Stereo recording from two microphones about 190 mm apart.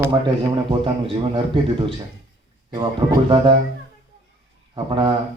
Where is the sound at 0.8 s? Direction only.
25° right (ahead or behind).